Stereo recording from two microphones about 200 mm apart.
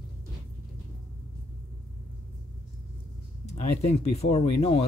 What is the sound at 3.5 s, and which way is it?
Speech, 30° left (ahead or behind).